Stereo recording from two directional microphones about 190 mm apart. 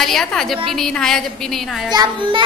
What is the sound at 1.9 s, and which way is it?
Speech, 25° right (ahead or behind).